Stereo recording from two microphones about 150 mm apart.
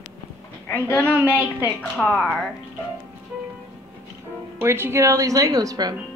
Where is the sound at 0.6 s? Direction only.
10° left (ahead or behind).